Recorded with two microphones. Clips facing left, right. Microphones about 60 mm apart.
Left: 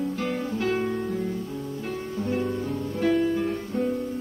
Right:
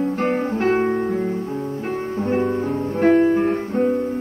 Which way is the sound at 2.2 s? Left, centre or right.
Right.